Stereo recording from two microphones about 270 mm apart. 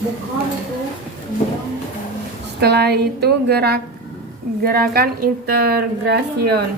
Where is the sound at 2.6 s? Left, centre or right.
Right.